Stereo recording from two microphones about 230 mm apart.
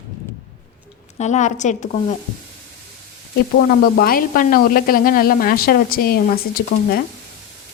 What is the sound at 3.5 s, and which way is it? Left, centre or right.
Speech, left.